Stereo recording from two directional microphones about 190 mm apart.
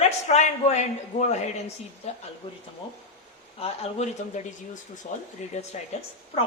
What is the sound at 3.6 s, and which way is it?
A man's voice, 35° left (ahead or behind).